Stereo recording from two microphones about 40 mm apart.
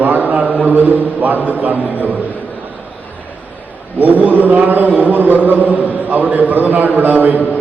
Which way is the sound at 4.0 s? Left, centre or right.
Right.